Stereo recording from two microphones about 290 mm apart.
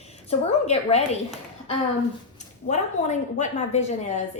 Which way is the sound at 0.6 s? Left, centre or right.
Left.